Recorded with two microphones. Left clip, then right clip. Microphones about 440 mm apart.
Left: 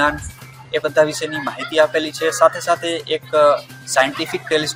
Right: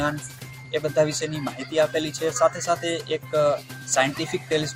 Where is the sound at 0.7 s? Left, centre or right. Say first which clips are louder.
Left 6 dB; right.